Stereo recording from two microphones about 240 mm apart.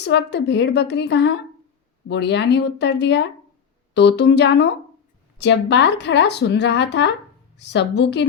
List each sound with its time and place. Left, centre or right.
0.0 s speech: left